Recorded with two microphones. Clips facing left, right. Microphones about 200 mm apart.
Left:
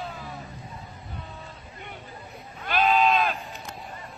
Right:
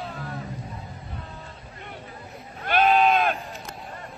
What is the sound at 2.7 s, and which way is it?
Sheep, 50° right (ahead or behind).